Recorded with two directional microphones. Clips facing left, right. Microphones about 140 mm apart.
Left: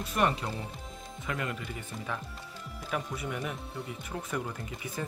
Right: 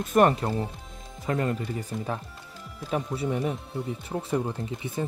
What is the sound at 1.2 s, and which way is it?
Speech, 35° right (ahead or behind).